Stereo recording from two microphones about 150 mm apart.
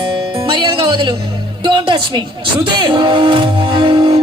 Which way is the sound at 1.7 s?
30° right (ahead or behind).